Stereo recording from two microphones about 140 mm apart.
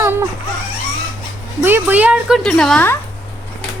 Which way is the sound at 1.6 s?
15° right (ahead or behind).